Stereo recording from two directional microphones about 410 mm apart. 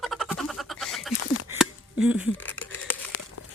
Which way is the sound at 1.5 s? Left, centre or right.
Centre.